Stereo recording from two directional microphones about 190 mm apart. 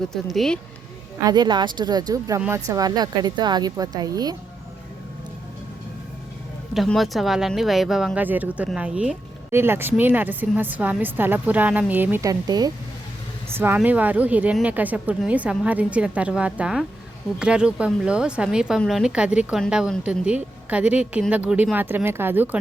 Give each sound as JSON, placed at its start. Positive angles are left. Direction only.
{"t": 0.1, "sound": "a woman's voice", "side_deg": 0}
{"t": 1.2, "sound": "speech", "side_deg": -20}
{"t": 6.7, "sound": "a woman's voice", "side_deg": 0}